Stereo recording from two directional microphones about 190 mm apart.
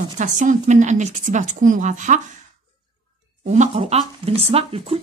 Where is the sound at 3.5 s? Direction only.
35° right (ahead or behind).